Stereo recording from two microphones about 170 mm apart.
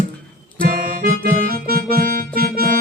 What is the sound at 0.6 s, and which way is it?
Music, 60° right (ahead or behind).